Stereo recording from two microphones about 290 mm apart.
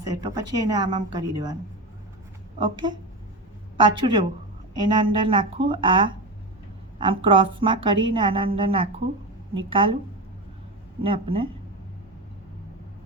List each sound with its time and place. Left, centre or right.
0.0 s a woman's voice: centre
2.6 s a woman's voice: centre
11.0 s speech: centre